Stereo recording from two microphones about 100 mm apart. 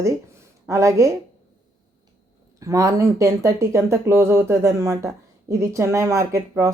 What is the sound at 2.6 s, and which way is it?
Speech, 35° right (ahead or behind).